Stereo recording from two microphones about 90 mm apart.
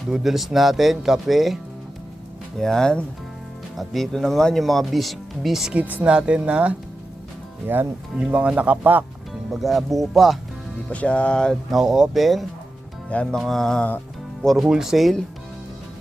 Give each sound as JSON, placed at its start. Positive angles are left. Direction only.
{"t": 0.1, "sound": "speech", "side_deg": -5}
{"t": 2.6, "sound": "speech", "side_deg": 5}
{"t": 5.7, "sound": "speech", "side_deg": -15}
{"t": 7.6, "sound": "speech", "side_deg": -25}
{"t": 9.5, "sound": "speech", "side_deg": 0}
{"t": 10.8, "sound": "speech", "side_deg": 15}
{"t": 11.7, "sound": "speech", "side_deg": -5}
{"t": 13.1, "sound": "speech", "side_deg": 15}
{"t": 13.4, "sound": "speech", "side_deg": 5}